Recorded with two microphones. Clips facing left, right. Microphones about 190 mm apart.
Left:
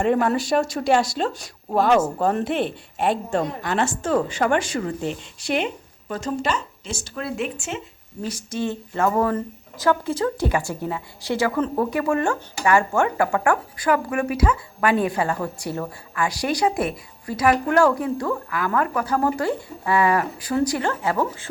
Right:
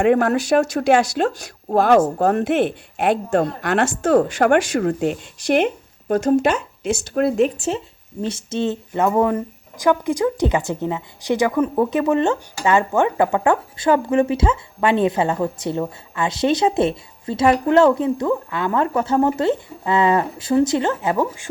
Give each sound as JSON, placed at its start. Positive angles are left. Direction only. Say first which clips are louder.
{"t": 0.0, "sound": "speech", "louder": "right 4 dB", "side_deg": -65}
{"t": 4.5, "sound": "speech", "louder": "right 6 dB", "side_deg": -70}
{"t": 8.2, "sound": "speech", "louder": "right 4 dB", "side_deg": -25}